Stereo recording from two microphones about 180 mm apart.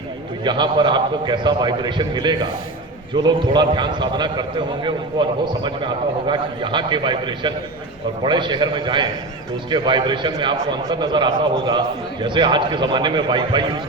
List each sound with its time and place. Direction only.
0.4 s a man's voice: 25° right (ahead or behind)